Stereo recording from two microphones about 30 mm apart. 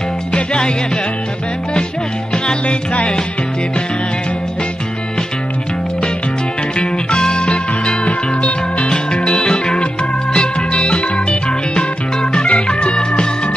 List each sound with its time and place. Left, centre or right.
0.3 s music: left
6.8 s music: left
8.9 s music: left